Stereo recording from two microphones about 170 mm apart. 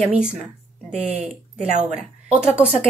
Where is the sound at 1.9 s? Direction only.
5° right (ahead or behind).